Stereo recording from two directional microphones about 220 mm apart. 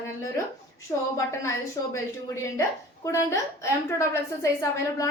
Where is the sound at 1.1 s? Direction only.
15° left (ahead or behind).